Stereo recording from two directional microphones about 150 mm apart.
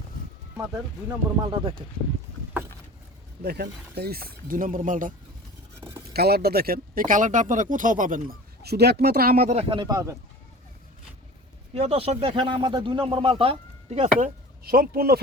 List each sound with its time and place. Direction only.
1.5 s speech: 25° right (ahead or behind)
3.4 s speech: 90° right; by 5.1 s 65° right (ahead or behind)
6.1 s speech: 90° right
9.5 s speech: 40° right (ahead or behind)
9.9 s speech: 20° right (ahead or behind)
11.7 s speech: 40° right (ahead or behind)
14.6 s speech: 85° right